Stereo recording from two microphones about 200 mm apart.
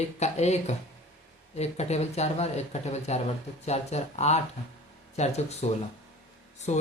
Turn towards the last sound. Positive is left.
turn(degrees=35)  # may be behind; listen again after turning